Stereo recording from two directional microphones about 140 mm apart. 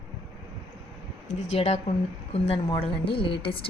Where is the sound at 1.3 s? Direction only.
55° left (ahead or behind).